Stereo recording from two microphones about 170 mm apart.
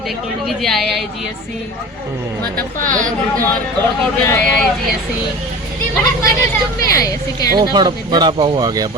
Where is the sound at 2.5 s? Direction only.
50° right (ahead or behind).